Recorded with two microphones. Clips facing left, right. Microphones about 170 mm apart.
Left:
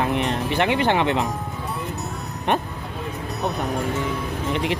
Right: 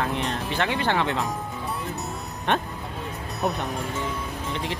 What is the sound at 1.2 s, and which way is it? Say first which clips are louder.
Music: left 2 dB; centre (ahead or behind).